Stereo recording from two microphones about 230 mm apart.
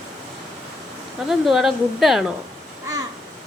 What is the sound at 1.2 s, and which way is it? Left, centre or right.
A woman's voice, centre.